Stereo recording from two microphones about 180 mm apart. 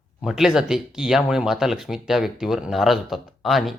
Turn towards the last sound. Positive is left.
turn(degrees=0)  # may be behind; listen again after turning